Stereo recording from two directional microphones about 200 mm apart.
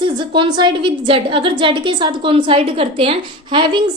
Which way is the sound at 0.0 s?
25° right (ahead or behind).